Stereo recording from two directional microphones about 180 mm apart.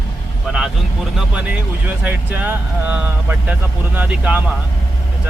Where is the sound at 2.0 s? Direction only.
10° right (ahead or behind).